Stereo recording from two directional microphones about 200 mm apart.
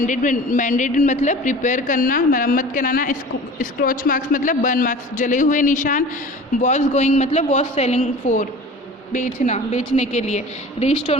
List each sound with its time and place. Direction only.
0.1 s a man's voice: 40° left (ahead or behind)